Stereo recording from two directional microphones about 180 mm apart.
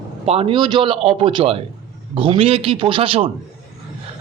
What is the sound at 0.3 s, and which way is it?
A man's voice, 30° right (ahead or behind).